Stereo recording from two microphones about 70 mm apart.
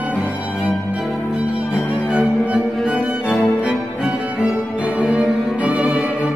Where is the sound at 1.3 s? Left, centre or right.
Centre.